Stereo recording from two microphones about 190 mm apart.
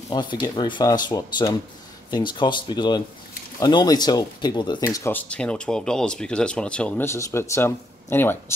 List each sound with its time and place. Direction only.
0.1 s speech: 25° left (ahead or behind)